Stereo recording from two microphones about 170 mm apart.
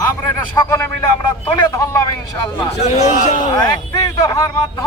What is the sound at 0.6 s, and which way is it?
A man's voice, 15° left (ahead or behind).